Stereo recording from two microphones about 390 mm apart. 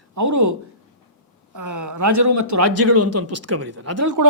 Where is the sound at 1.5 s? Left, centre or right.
Right.